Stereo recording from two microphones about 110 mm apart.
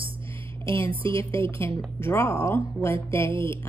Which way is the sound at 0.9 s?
50° right (ahead or behind).